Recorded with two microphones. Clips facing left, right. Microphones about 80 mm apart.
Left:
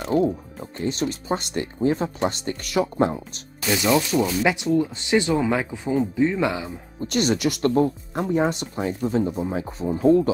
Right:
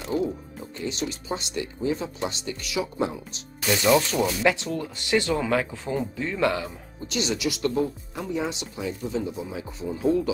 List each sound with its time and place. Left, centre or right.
0.0 s speech: left
4.4 s speech: centre
7.0 s speech: left